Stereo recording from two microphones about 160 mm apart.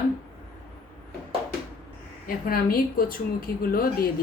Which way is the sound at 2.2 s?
65° left (ahead or behind).